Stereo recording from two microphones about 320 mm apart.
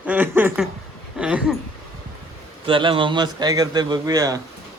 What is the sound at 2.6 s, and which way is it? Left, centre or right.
A man's voice, centre.